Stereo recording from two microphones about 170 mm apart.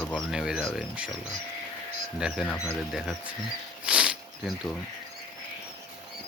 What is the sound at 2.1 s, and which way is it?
Speech, 5° right (ahead or behind).